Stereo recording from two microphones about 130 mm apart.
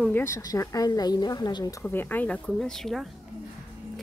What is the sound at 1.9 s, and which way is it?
Speech, 15° left (ahead or behind).